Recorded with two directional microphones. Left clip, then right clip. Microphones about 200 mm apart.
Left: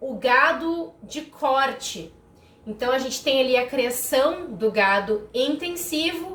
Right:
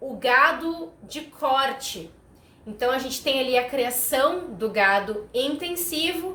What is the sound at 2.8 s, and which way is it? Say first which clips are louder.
A woman's voice: left 1 dB; 20° right (ahead or behind).